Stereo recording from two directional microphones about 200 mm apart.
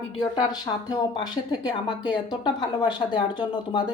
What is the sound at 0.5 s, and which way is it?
Speech, 20° left (ahead or behind).